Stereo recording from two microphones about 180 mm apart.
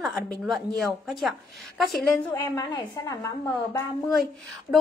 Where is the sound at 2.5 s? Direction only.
20° left (ahead or behind).